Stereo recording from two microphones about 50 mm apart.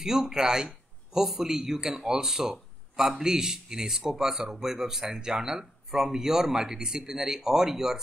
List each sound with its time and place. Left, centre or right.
0.0 s a man's voice: centre